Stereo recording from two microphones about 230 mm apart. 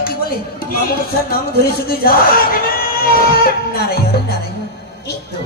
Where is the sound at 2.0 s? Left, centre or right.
Left.